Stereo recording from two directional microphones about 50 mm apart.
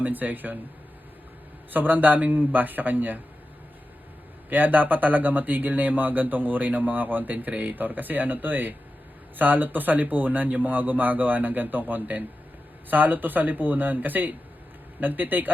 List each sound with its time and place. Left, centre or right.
0.0 s speech: right
1.7 s speech: right
4.4 s speech: right